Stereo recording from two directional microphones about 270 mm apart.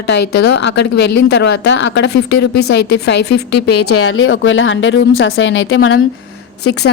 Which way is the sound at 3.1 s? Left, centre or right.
Left.